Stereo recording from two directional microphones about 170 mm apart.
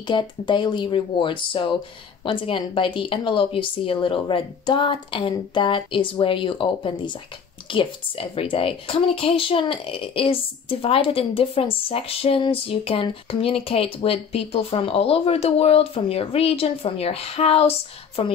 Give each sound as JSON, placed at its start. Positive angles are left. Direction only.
{"t": 0.0, "sound": "speech", "side_deg": 25}